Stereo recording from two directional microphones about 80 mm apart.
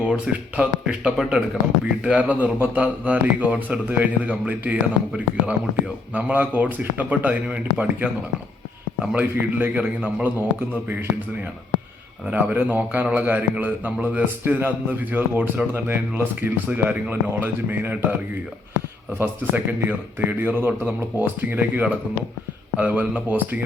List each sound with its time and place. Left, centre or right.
0.0 s a man's voice: centre
9.1 s a man's voice: right
12.3 s a man's voice: centre
19.2 s a man's voice: right